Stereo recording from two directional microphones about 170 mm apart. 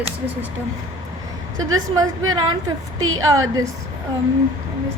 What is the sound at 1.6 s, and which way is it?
A woman's voice, 20° right (ahead or behind).